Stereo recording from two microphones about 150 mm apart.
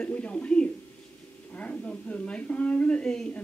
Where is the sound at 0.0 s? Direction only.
10° left (ahead or behind).